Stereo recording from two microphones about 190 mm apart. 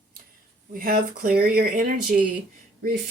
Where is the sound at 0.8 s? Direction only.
50° right (ahead or behind).